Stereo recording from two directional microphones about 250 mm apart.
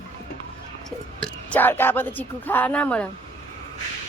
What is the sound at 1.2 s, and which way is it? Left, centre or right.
Speech, centre.